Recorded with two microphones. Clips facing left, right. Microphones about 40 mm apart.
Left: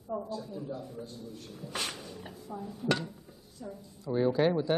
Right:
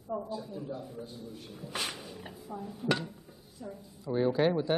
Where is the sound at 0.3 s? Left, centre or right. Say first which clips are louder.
Even; centre.